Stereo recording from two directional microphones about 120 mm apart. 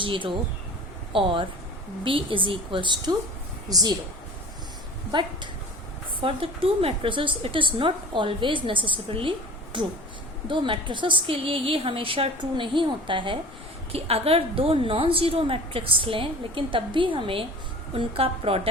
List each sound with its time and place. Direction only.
0.0 s a woman's voice: 45° right (ahead or behind)
6.2 s a woman's voice: 50° right (ahead or behind)
13.9 s a woman's voice: 55° right (ahead or behind)